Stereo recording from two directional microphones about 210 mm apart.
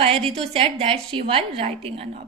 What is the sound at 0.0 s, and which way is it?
A woman's voice, 30° right (ahead or behind).